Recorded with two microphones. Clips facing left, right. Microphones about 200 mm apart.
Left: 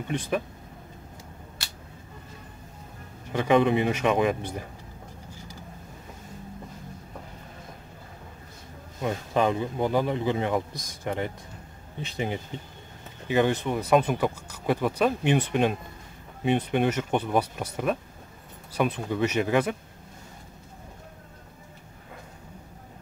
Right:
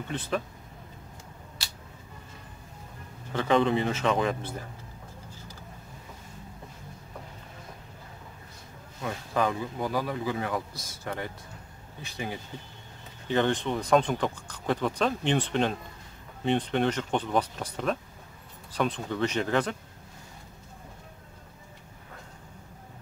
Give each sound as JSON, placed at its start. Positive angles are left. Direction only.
{"t": 0.1, "sound": "speech", "side_deg": 10}
{"t": 3.3, "sound": "speech", "side_deg": 15}
{"t": 9.0, "sound": "speech", "side_deg": 20}
{"t": 13.3, "sound": "speech", "side_deg": 10}